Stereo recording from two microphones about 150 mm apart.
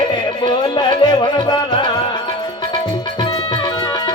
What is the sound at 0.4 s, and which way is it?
Music, 30° left (ahead or behind).